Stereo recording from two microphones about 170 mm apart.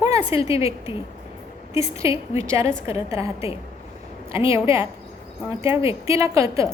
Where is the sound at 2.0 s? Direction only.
15° right (ahead or behind).